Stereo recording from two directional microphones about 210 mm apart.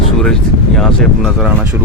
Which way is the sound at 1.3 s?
5° right (ahead or behind).